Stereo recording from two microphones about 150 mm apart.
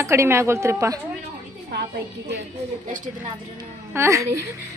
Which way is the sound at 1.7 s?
90° right.